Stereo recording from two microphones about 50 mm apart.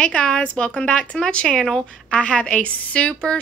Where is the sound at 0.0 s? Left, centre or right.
Centre.